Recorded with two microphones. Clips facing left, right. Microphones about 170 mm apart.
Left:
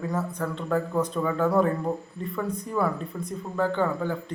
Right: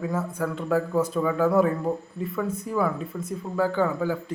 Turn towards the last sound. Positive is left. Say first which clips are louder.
# right 2 dB
turn(degrees=-5)  # may be behind; listen again after turning